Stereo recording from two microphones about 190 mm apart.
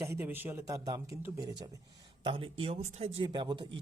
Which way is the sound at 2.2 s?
30° right (ahead or behind).